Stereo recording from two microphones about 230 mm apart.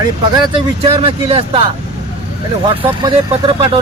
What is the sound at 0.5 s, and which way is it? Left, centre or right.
Speech, right.